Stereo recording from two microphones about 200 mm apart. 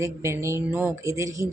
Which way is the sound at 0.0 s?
15° right (ahead or behind).